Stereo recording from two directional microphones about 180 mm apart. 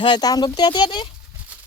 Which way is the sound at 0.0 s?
25° left (ahead or behind).